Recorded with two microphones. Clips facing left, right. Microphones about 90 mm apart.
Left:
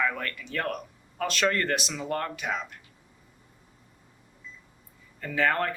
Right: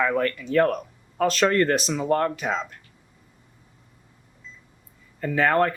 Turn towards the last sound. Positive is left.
turn(degrees=-40)  # may be behind; listen again after turning